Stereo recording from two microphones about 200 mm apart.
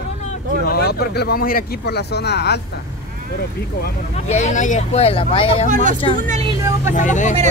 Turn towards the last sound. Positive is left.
turn(degrees=40)  # may be behind; listen again after turning